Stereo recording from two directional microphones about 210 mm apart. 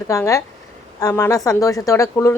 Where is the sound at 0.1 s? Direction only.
15° left (ahead or behind).